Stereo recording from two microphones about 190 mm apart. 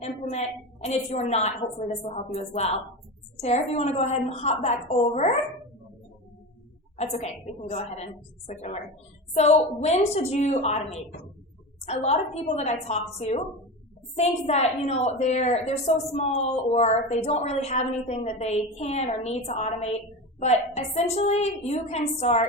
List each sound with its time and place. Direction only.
0.0 s a woman's voice: 35° left (ahead or behind)
7.0 s a woman's voice: 35° left (ahead or behind)